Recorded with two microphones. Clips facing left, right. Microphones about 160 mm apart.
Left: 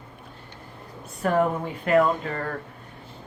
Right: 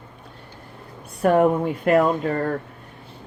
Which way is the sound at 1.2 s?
50° right (ahead or behind).